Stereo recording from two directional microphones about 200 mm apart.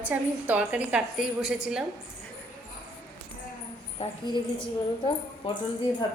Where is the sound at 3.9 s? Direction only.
25° left (ahead or behind).